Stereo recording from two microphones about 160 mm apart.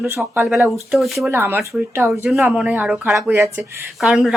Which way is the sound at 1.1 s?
15° right (ahead or behind).